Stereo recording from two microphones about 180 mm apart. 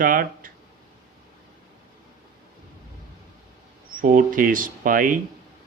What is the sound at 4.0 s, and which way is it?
Speech, 50° right (ahead or behind).